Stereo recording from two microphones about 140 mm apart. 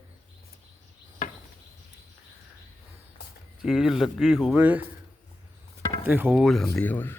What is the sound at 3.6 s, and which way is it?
Speech, 5° right (ahead or behind).